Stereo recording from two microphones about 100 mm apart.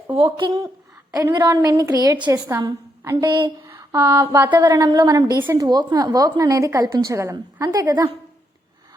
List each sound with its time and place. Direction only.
0.1 s speech: 65° right (ahead or behind)
1.1 s a woman's voice: 45° right (ahead or behind)
3.2 s speech: 50° right (ahead or behind)
3.8 s a sound: 30° right (ahead or behind)
4.5 s a woman's voice: 40° right (ahead or behind)